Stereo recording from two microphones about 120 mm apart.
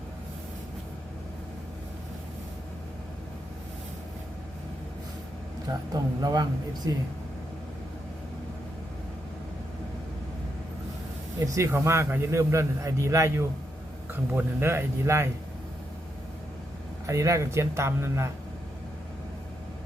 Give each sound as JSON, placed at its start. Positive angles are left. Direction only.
{"t": 5.9, "sound": "a man's voice", "side_deg": -35}
{"t": 11.3, "sound": "a man's voice", "side_deg": -25}
{"t": 17.1, "sound": "a man's voice", "side_deg": -25}